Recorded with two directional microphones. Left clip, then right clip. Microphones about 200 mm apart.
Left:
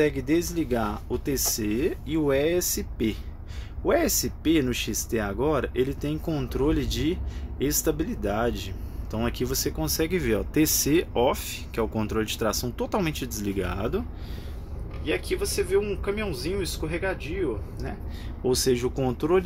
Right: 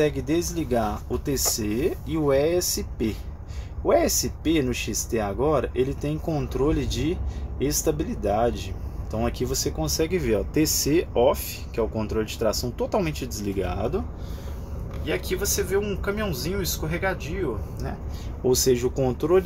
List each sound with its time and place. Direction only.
0.0 s speech: centre (ahead or behind)
15.7 s speech: centre (ahead or behind)
18.4 s speech: centre (ahead or behind)